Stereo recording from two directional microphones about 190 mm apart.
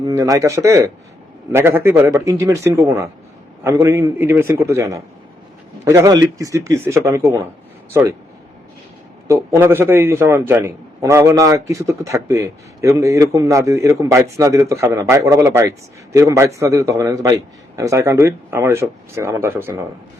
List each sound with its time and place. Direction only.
0.0 s a man's voice: 20° right (ahead or behind)
9.2 s a man's voice: 15° right (ahead or behind)